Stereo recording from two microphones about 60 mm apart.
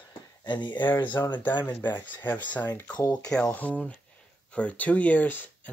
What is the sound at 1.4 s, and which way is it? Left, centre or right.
Speech, left.